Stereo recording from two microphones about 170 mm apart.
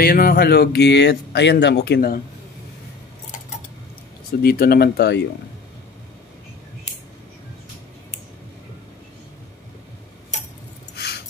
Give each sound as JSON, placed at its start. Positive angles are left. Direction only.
{"t": 0.0, "sound": "speech", "side_deg": 60}
{"t": 4.4, "sound": "speech", "side_deg": 65}